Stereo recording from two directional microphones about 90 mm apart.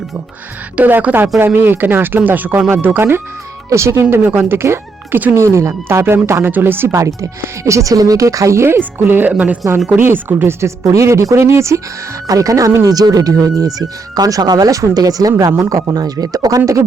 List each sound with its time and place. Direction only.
0.8 s speech: 20° right (ahead or behind); by 16.8 s 35° right (ahead or behind)